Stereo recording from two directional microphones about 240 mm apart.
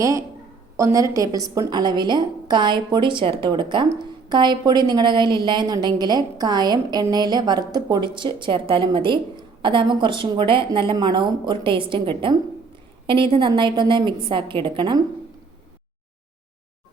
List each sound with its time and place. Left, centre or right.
0.8 s a woman's voice: centre
13.3 s a woman's voice: centre